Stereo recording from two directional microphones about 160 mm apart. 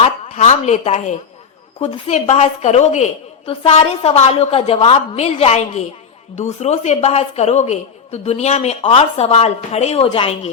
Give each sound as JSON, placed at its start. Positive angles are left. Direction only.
{"t": 0.0, "sound": "a woman's voice", "side_deg": 45}